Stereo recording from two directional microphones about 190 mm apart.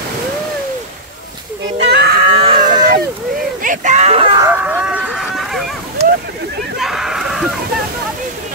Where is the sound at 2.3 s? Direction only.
30° right (ahead or behind).